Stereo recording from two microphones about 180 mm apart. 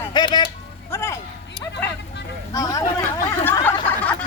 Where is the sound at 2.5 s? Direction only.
20° left (ahead or behind).